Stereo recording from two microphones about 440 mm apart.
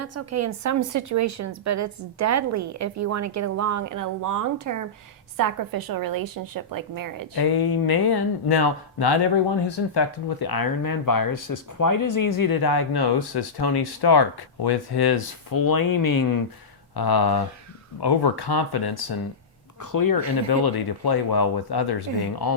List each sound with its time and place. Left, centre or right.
0.0 s a woman's voice: right
7.3 s speech: left
19.8 s speech: left
20.5 s speech: left